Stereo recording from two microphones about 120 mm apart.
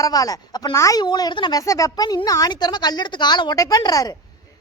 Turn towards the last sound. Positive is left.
turn(degrees=30)  # may be behind; listen again after turning